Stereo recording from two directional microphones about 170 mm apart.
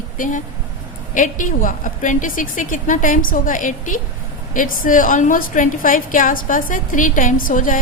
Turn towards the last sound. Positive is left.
turn(degrees=50)  # may be behind; listen again after turning